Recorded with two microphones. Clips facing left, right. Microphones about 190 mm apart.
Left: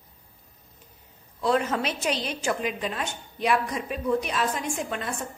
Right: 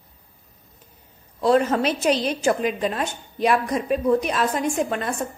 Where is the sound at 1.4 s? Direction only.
40° right (ahead or behind).